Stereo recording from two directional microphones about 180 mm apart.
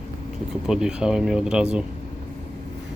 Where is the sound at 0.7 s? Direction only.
5° right (ahead or behind).